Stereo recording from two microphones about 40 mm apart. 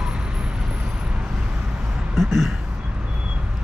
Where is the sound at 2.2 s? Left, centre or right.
Centre.